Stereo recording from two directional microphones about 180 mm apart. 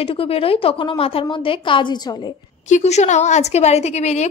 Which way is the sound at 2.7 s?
40° left (ahead or behind).